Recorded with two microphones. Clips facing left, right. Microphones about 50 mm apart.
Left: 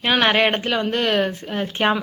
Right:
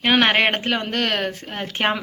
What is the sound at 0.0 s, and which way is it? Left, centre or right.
Speech, right.